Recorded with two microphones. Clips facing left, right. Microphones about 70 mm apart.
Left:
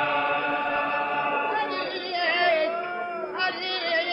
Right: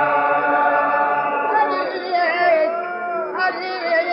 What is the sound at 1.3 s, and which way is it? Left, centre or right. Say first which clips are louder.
Choir: right 7 dB; right.